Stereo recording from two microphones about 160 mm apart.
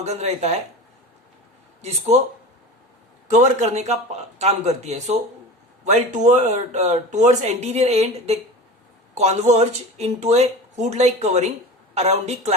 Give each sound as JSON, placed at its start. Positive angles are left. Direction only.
{"t": 0.0, "sound": "speech", "side_deg": -45}
{"t": 1.8, "sound": "speech", "side_deg": -45}
{"t": 3.2, "sound": "speech", "side_deg": -50}